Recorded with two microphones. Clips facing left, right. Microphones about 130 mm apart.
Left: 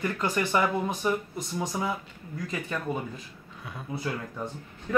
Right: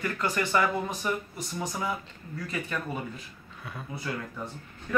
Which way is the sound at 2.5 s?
20° left (ahead or behind).